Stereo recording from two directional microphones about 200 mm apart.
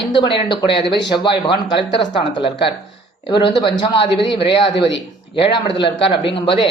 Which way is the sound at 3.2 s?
25° left (ahead or behind).